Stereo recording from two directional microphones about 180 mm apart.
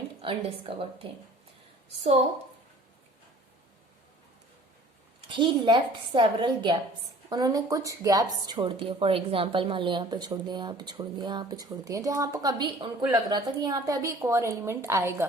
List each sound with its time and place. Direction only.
0.2 s a woman's voice: 30° right (ahead or behind)
5.3 s speech: 25° right (ahead or behind)